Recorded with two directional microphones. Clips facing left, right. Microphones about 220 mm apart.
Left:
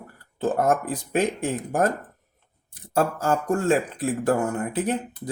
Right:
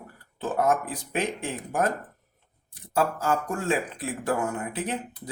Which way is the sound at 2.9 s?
45° left (ahead or behind).